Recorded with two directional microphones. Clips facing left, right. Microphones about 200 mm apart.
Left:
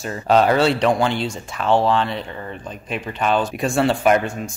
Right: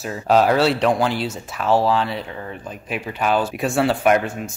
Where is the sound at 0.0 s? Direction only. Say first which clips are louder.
Even; 5° right (ahead or behind).